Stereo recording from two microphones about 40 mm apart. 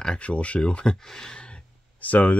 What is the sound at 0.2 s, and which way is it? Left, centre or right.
Speech, left.